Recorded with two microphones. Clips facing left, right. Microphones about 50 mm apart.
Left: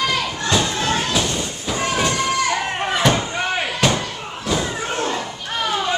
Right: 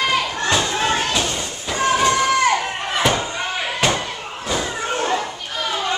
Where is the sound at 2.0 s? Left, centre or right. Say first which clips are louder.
Right 4 dB; right.